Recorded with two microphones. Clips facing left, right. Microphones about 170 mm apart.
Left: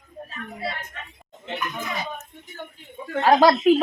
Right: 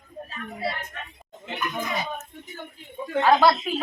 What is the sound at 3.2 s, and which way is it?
Speech, 40° left (ahead or behind).